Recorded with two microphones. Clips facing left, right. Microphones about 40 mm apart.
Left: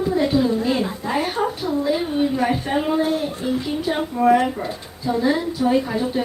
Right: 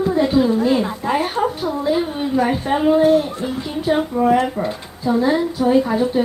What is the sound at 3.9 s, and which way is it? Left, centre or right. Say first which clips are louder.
Speech: right 6 dB; centre.